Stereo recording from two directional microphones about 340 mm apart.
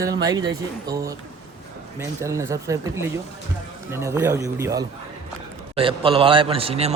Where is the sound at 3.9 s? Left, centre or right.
Centre.